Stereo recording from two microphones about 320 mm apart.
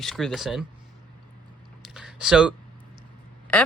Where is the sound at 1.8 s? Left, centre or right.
Centre.